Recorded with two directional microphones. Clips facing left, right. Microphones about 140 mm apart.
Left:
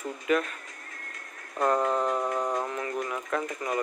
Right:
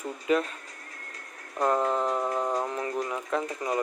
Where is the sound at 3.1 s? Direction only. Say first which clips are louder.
Right 1 dB; 15° right (ahead or behind).